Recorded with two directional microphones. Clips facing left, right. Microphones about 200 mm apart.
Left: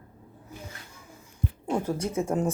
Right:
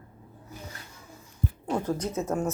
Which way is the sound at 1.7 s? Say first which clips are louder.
Left 1 dB; 10° left (ahead or behind).